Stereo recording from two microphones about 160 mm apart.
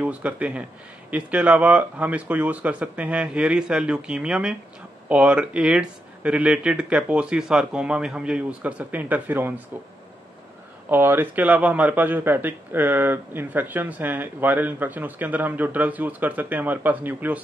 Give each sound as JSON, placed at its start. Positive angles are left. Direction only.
{"t": 0.0, "sound": "a man's voice", "side_deg": -10}
{"t": 10.9, "sound": "a man's voice", "side_deg": -15}